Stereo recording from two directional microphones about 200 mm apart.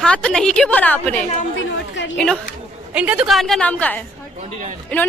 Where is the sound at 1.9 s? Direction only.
65° left (ahead or behind).